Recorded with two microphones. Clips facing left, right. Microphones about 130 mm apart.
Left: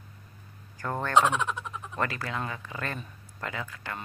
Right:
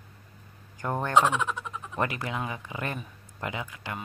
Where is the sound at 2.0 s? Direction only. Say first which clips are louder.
Right 1 dB; 20° right (ahead or behind).